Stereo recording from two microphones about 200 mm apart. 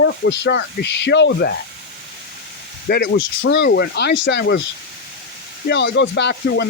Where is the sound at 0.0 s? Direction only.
60° left (ahead or behind).